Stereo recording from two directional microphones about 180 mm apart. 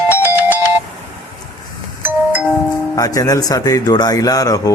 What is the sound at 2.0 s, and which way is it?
Doorbell, 10° right (ahead or behind).